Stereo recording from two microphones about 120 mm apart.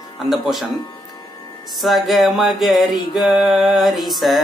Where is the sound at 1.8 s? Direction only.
Centre (ahead or behind).